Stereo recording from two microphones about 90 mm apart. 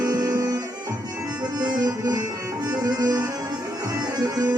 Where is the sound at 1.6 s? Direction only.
45° right (ahead or behind).